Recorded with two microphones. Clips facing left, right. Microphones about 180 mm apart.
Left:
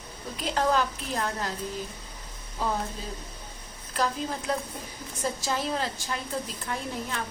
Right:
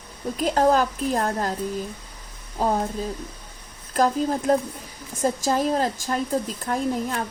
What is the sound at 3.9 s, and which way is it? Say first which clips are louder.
Speech: right 8 dB; 45° right (ahead or behind).